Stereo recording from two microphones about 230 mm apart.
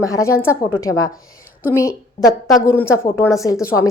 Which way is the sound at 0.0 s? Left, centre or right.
Centre.